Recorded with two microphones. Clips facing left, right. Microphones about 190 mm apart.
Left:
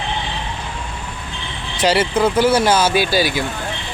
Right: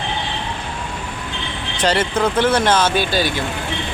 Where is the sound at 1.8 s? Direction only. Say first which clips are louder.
Left 2 dB; 10° left (ahead or behind).